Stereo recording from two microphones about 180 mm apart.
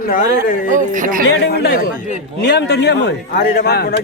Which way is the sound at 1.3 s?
65° left (ahead or behind).